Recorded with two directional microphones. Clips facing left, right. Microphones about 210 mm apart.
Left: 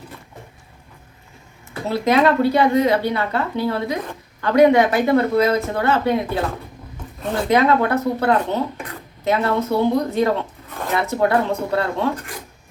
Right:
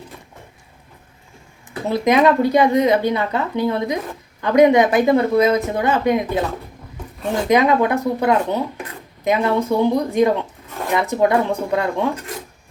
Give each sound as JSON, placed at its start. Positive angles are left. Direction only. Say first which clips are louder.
{"t": 1.9, "sound": "a woman's voice", "louder": "right 2 dB", "side_deg": -15}
{"t": 7.4, "sound": "a woman's voice", "louder": "right 1 dB", "side_deg": -15}